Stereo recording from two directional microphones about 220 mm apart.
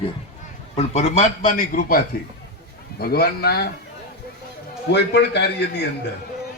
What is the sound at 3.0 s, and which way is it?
Speech, 45° left (ahead or behind).